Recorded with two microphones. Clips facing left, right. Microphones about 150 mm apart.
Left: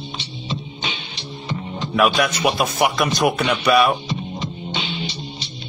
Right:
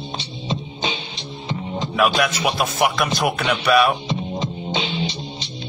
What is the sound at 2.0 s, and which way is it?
Speech, centre (ahead or behind).